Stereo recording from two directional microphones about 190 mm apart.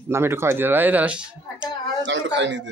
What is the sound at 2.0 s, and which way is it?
Speech, 75° right (ahead or behind).